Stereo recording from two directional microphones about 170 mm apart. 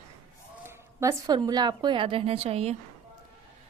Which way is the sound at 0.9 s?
15° right (ahead or behind).